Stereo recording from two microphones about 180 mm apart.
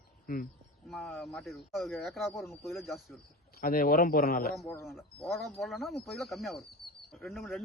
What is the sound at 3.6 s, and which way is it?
Speech, 50° left (ahead or behind).